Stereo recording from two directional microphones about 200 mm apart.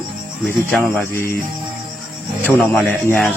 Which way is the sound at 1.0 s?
10° left (ahead or behind).